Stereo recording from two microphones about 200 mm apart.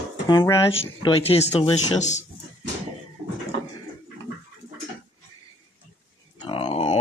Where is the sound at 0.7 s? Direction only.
30° left (ahead or behind).